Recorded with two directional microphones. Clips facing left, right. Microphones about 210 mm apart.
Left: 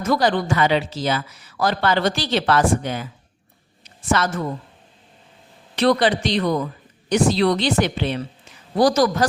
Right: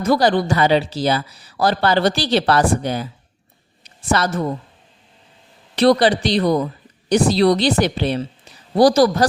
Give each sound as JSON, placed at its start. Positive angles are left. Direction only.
{"t": 0.0, "sound": "speech", "side_deg": -35}
{"t": 4.1, "sound": "speech", "side_deg": -35}
{"t": 5.7, "sound": "a woman's voice", "side_deg": -35}